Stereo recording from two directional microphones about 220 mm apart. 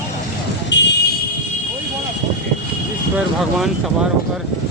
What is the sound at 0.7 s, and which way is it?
Vehicle, 55° left (ahead or behind).